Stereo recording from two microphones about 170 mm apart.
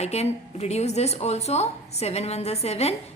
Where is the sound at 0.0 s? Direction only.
40° left (ahead or behind).